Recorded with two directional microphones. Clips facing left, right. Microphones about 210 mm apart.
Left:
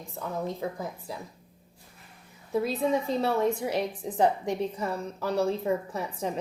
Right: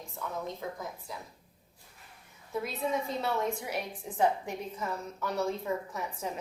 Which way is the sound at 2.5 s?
30° left (ahead or behind).